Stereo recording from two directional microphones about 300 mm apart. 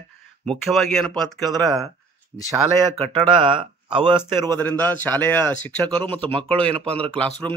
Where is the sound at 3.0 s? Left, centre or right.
Centre.